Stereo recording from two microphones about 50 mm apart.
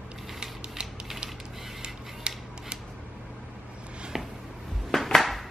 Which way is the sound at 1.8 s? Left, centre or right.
Centre.